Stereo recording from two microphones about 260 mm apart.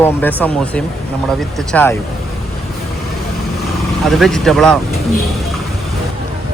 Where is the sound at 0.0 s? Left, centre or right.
Centre.